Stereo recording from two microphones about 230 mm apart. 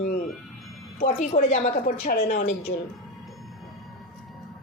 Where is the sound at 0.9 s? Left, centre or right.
Left.